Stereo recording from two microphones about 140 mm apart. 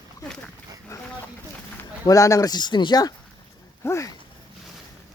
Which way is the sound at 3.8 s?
20° left (ahead or behind).